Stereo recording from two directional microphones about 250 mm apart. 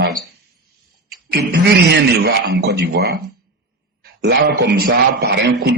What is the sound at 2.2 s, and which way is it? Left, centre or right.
A man's voice, right.